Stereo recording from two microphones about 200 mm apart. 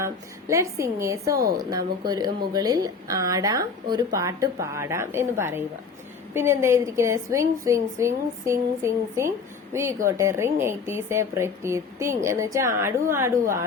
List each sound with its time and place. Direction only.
0.0 s a woman's voice: 15° right (ahead or behind)